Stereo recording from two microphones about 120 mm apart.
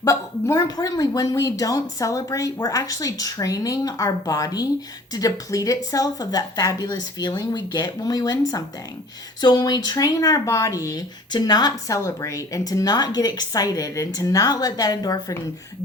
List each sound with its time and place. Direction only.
0.0 s speech: 25° left (ahead or behind)